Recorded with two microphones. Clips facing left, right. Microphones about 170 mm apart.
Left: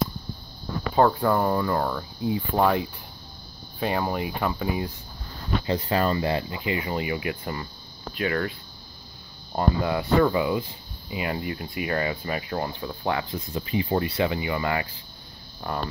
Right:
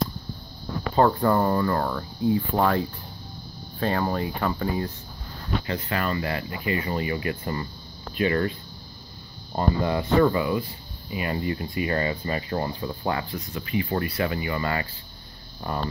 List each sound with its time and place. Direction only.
0.9 s speech: 5° left (ahead or behind)
5.7 s speech: 30° left (ahead or behind); by 8.5 s centre (ahead or behind)
9.6 s speech: 5° left (ahead or behind)
11.3 s speech: 5° left (ahead or behind)
13.5 s speech: 30° left (ahead or behind); by 14.9 s 15° left (ahead or behind)
15.6 s speech: centre (ahead or behind)